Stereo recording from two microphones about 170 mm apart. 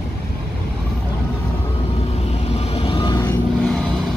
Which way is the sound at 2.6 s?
35° left (ahead or behind).